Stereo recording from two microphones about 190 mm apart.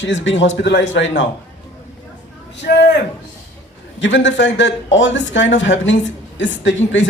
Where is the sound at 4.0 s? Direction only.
75° left (ahead or behind).